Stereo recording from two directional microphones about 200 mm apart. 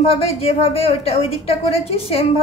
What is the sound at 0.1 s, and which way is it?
A woman's voice, 30° left (ahead or behind).